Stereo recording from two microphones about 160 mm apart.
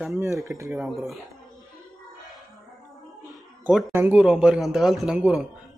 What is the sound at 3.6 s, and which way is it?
A man's voice, centre (ahead or behind).